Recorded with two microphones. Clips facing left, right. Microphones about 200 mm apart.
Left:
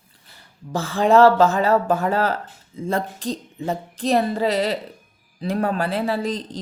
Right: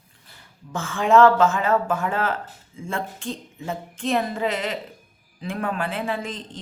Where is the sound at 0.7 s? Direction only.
35° left (ahead or behind).